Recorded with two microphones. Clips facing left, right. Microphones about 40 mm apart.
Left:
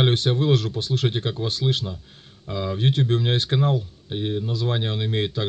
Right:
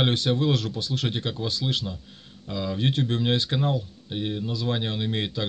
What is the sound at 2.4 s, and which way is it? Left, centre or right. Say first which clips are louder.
Speech: left 2 dB; left.